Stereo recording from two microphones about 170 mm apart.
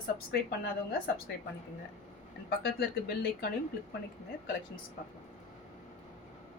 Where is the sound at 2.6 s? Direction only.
70° left (ahead or behind).